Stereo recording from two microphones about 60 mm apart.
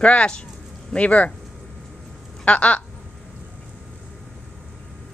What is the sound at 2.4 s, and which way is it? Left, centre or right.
Speech, left.